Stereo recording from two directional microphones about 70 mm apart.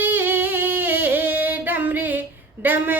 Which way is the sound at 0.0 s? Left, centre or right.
Right.